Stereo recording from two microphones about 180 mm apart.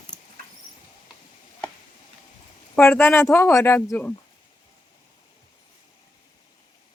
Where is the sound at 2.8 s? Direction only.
10° left (ahead or behind).